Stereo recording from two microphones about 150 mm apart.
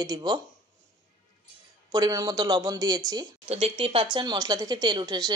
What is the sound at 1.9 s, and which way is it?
Speech, 25° right (ahead or behind).